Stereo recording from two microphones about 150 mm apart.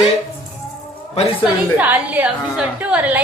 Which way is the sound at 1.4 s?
10° right (ahead or behind).